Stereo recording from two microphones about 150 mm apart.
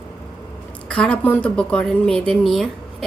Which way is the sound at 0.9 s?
10° left (ahead or behind).